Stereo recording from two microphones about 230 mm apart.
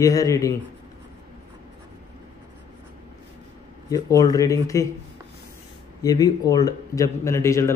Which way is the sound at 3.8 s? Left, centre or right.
Centre.